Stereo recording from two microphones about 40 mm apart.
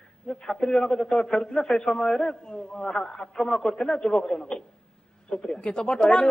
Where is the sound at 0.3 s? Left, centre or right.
Centre.